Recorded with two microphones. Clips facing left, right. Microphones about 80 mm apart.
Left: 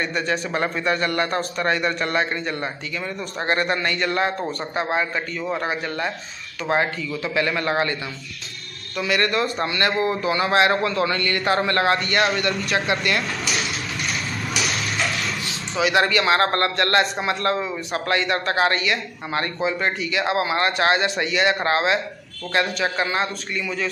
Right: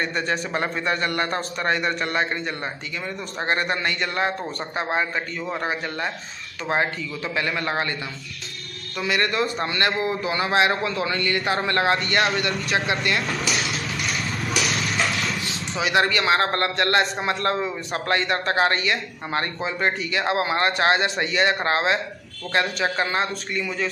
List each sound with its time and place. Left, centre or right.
0.0 s a man's voice: right
5.6 s a man's voice: right
8.9 s speech: right
9.2 s a man's voice: right
15.8 s a man's voice: right